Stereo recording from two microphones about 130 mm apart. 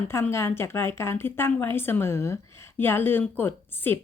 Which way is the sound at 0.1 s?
20° left (ahead or behind).